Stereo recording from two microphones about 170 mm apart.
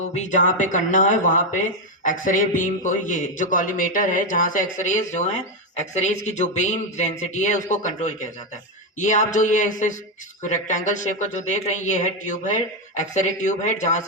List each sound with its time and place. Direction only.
0.0 s speech: 45° left (ahead or behind)